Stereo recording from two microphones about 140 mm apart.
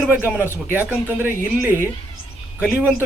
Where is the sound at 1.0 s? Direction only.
15° right (ahead or behind).